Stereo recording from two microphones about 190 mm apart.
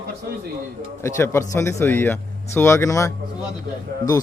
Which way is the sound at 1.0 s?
15° left (ahead or behind).